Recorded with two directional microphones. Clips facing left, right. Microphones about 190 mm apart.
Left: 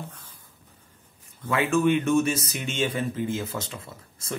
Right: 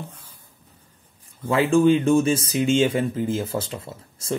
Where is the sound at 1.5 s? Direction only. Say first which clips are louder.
Right 5 dB; 30° right (ahead or behind).